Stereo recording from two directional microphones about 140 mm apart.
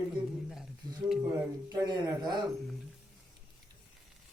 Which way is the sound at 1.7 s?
30° right (ahead or behind).